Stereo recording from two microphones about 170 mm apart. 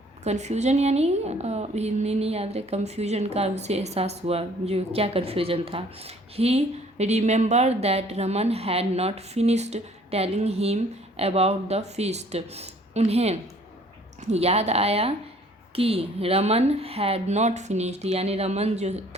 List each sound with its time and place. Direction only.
0.3 s a woman's voice: 40° right (ahead or behind)